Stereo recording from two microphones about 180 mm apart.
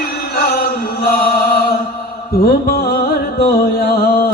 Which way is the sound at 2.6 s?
55° left (ahead or behind).